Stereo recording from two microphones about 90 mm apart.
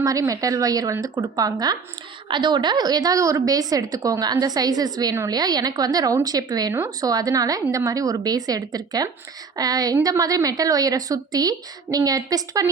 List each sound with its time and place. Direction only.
0.0 s a woman's voice: 40° right (ahead or behind)